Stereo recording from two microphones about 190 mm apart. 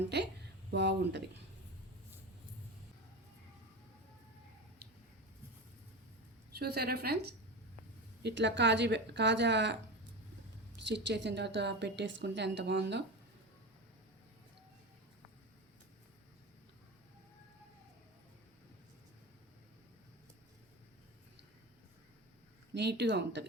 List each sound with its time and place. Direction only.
0.1 s speech: 60° right (ahead or behind)
6.6 s a woman's voice: 55° right (ahead or behind)
10.8 s a woman's voice: 65° right (ahead or behind)
22.7 s speech: 65° right (ahead or behind)